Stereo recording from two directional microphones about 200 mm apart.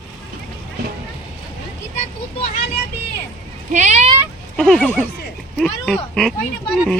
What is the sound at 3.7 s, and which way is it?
Speech, 35° right (ahead or behind).